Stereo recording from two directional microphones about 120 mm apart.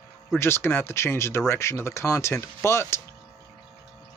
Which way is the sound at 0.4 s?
20° left (ahead or behind).